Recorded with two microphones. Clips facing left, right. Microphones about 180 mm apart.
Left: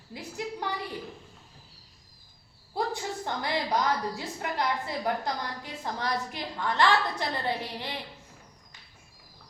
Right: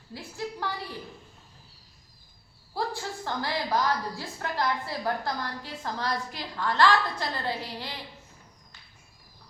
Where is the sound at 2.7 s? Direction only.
20° left (ahead or behind).